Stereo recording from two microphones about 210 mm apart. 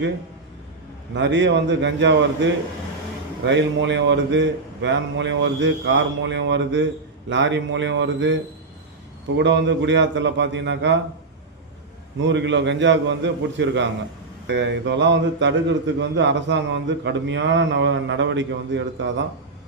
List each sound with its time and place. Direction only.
1.1 s speech: 60° right (ahead or behind)
9.4 s speech: 60° right (ahead or behind)
12.2 s speech: 60° right (ahead or behind)